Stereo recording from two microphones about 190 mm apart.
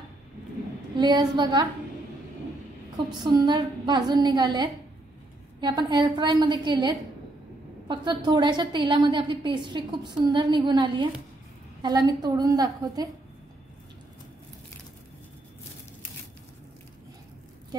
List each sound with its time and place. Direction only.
0.9 s a woman's voice: 25° right (ahead or behind)
3.3 s a woman's voice: 25° right (ahead or behind)